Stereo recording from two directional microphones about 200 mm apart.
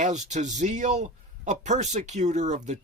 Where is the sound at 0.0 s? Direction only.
35° right (ahead or behind).